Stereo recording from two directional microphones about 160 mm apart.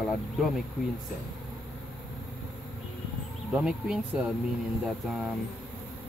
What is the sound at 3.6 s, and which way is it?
Speech, 5° right (ahead or behind).